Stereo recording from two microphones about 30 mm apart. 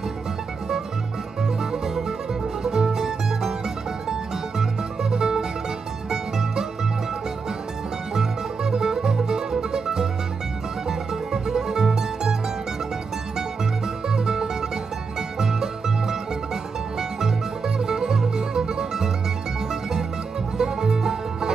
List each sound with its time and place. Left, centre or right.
1.6 s music: centre
5.1 s music: centre
8.1 s music: centre
14.0 s music: centre
17.7 s music: centre